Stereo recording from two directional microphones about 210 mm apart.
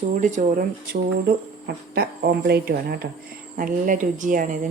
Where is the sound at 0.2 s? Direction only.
35° right (ahead or behind).